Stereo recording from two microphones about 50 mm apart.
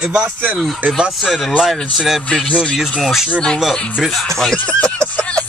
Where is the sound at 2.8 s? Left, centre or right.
Centre.